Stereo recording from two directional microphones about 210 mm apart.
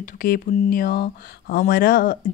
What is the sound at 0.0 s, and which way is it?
Speech, 40° left (ahead or behind).